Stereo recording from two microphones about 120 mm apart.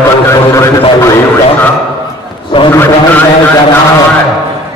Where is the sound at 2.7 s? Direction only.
20° left (ahead or behind).